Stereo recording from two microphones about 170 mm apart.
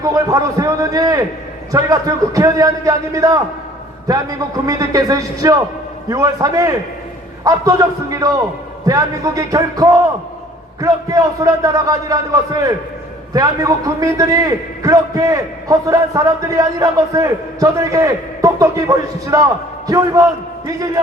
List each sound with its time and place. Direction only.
0.1 s a man's voice: 20° right (ahead or behind)